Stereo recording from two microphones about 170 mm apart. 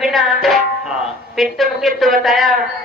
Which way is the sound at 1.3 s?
Centre (ahead or behind).